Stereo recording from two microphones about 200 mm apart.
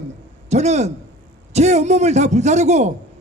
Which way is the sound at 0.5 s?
35° right (ahead or behind).